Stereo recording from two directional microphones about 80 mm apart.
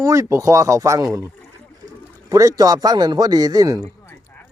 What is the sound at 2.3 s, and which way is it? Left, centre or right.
A man's voice, right.